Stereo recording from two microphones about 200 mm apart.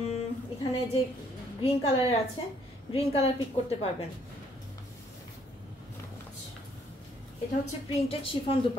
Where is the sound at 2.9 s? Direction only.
30° left (ahead or behind).